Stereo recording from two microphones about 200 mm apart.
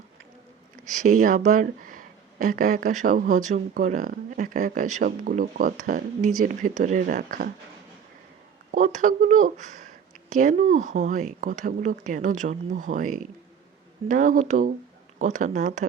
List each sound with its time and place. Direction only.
1.0 s speech: 40° right (ahead or behind)
8.7 s speech: 40° right (ahead or behind)